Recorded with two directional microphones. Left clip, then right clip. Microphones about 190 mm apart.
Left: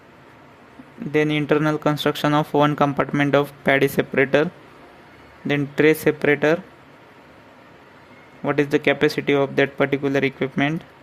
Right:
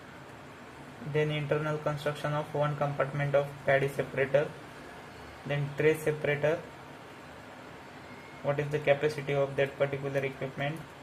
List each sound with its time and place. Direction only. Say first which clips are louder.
1.1 s speech: left 11 dB; 70° left (ahead or behind)
5.5 s speech: left 10 dB; 70° left (ahead or behind)
8.4 s speech: left 9 dB; 70° left (ahead or behind)